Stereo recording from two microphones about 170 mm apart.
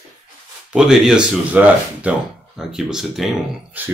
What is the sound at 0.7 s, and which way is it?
Speech, 5° right (ahead or behind).